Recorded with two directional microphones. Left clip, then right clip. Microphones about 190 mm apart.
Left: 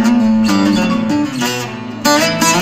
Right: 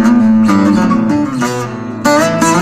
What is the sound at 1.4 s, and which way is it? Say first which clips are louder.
Music: right 2 dB; 15° left (ahead or behind).